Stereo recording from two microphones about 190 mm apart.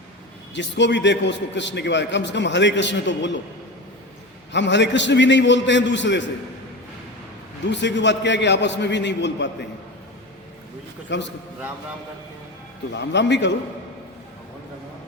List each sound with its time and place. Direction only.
0.5 s a man's voice: 70° left (ahead or behind)
4.5 s a man's voice: 65° left (ahead or behind)
7.7 s a man's voice: 70° left (ahead or behind)
11.1 s a man's voice: 70° left (ahead or behind)
12.9 s speech: 65° left (ahead or behind)